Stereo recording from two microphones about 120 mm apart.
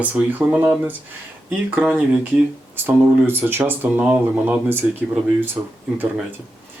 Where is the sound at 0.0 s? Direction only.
15° right (ahead or behind).